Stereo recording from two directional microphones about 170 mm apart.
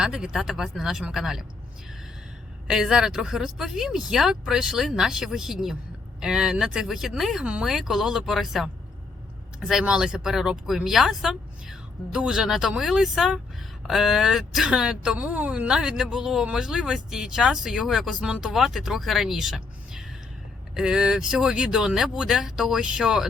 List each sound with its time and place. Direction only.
0.0 s speech: 5° right (ahead or behind)
2.6 s speech: 5° right (ahead or behind)